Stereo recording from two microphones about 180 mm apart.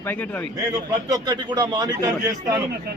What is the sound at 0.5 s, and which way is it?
A man's voice, 20° right (ahead or behind).